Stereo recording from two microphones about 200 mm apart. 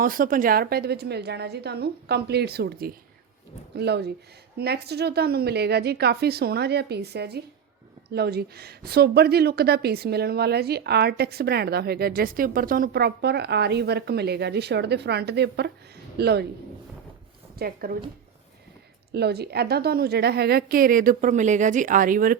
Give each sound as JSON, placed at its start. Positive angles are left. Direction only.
{"t": 0.0, "sound": "a woman's voice", "side_deg": -45}
{"t": 17.6, "sound": "a woman's voice", "side_deg": -45}
{"t": 19.1, "sound": "a woman's voice", "side_deg": -55}